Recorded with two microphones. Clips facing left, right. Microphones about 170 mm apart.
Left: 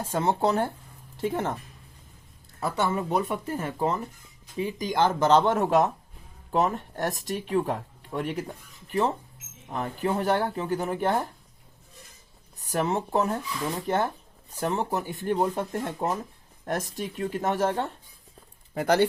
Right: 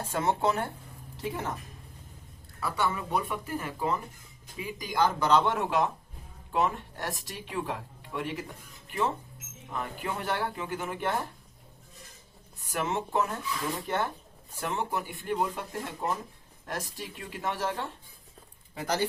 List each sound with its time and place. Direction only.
0.0 s speech: 35° left (ahead or behind)
1.2 s speech: 50° left (ahead or behind)
2.6 s speech: 25° left (ahead or behind)
4.5 s speech: 25° left (ahead or behind)
5.5 s speech: 40° left (ahead or behind)
12.5 s speech: 40° left (ahead or behind)
18.7 s speech: 60° left (ahead or behind)